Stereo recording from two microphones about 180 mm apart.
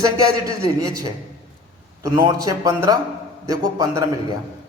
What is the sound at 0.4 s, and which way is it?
Speech, 20° right (ahead or behind).